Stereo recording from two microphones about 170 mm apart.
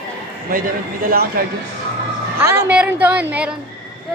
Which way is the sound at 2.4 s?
15° right (ahead or behind).